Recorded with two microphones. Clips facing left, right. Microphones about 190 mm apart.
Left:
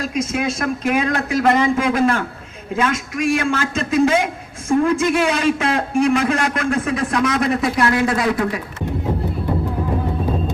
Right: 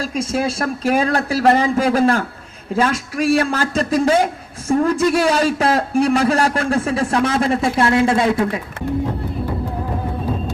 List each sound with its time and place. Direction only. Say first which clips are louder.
0.0 s a man's voice: right 1 dB; 30° right (ahead or behind)